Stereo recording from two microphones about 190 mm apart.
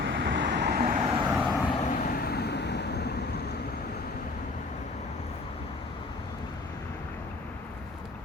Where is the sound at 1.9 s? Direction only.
45° left (ahead or behind).